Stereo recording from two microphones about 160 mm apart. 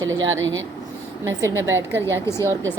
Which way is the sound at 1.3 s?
15° right (ahead or behind).